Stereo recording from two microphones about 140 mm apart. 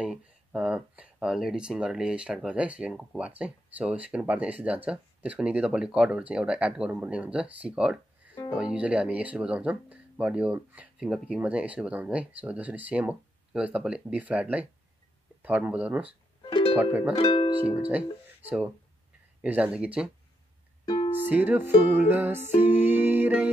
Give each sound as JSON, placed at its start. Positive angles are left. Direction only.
{"t": 0.0, "sound": "speech", "side_deg": -5}
{"t": 16.4, "sound": "music", "side_deg": 35}
{"t": 16.7, "sound": "speech", "side_deg": -10}
{"t": 17.2, "sound": "speech", "side_deg": 40}
{"t": 17.6, "sound": "speech", "side_deg": -10}
{"t": 19.4, "sound": "speech", "side_deg": -10}
{"t": 20.8, "sound": "music", "side_deg": 35}
{"t": 21.3, "sound": "speech", "side_deg": -15}
{"t": 22.6, "sound": "music", "side_deg": -15}